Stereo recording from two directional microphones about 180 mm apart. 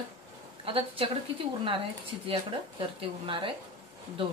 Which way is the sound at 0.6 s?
30° right (ahead or behind).